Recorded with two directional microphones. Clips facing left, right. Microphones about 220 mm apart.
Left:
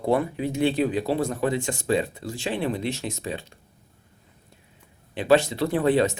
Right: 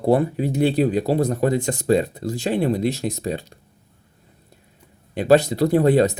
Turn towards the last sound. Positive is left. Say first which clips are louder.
# right 5 dB
turn(degrees=-40)  # may be behind; listen again after turning